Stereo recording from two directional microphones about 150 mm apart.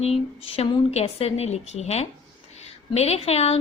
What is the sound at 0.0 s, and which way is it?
A woman's voice, 40° left (ahead or behind).